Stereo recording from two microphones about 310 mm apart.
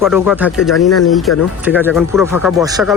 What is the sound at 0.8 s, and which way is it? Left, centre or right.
Speech, left.